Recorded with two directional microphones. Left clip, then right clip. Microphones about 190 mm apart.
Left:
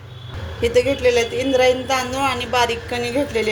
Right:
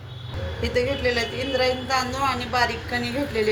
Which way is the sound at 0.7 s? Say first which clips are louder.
Left 6 dB; 45° left (ahead or behind).